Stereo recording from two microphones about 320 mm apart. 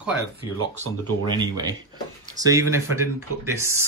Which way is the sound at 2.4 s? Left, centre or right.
Centre.